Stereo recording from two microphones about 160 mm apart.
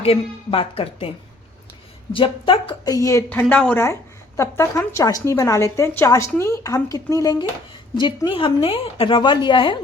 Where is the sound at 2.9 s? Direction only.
20° left (ahead or behind).